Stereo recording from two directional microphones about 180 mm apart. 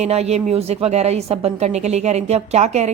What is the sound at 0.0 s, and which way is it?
Speech, 35° right (ahead or behind).